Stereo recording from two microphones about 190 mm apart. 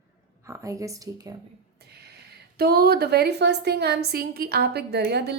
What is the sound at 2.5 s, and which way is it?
A woman's voice, 55° right (ahead or behind).